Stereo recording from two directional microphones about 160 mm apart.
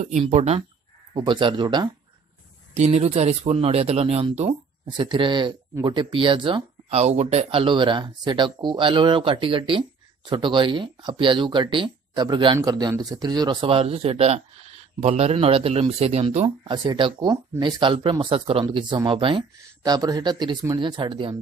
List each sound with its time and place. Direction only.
0.2 s speech: 40° right (ahead or behind)
1.1 s speech: 30° right (ahead or behind)
2.7 s speech: 40° right (ahead or behind)
16.4 s speech: 30° right (ahead or behind)